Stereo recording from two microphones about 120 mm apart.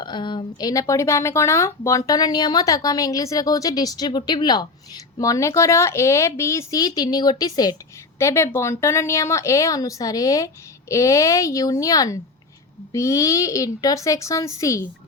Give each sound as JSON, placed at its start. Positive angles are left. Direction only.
{"t": 0.0, "sound": "a woman's voice", "side_deg": 40}